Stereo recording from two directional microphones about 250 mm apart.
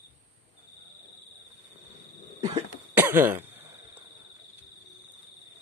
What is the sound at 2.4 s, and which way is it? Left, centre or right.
Cough, right.